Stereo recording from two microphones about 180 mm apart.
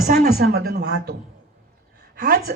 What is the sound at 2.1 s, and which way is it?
Speech, 60° right (ahead or behind).